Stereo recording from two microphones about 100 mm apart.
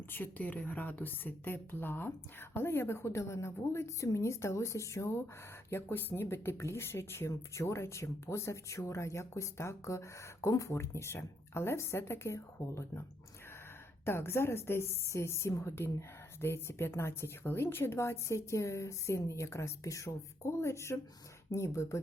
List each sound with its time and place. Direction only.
0.1 s speech: 20° left (ahead or behind)